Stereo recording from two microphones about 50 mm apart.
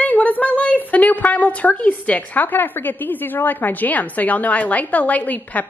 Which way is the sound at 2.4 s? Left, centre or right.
Left.